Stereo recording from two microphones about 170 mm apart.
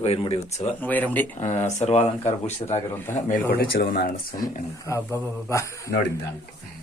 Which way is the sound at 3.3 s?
60° left (ahead or behind).